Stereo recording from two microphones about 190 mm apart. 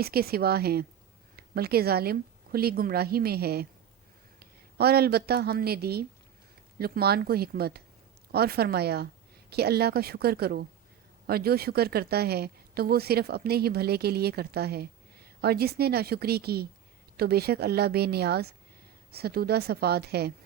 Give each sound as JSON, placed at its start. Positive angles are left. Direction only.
{"t": 0.0, "sound": "speech", "side_deg": -55}